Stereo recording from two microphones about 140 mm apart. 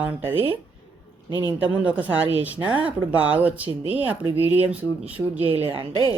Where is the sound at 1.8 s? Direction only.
10° right (ahead or behind).